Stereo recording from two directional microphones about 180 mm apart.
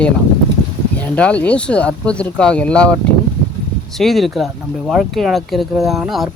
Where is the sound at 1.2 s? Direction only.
5° left (ahead or behind).